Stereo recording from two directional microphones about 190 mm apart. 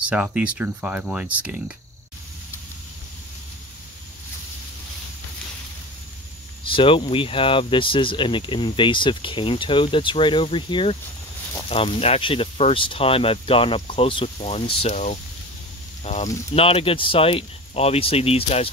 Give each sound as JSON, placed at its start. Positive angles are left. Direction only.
{"t": 0.1, "sound": "speech", "side_deg": -5}
{"t": 6.6, "sound": "speech", "side_deg": 25}